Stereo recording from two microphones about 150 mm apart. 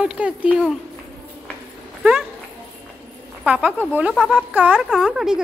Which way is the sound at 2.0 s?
5° right (ahead or behind).